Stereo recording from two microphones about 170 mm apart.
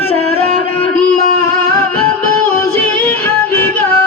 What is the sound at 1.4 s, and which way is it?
Music, 15° left (ahead or behind).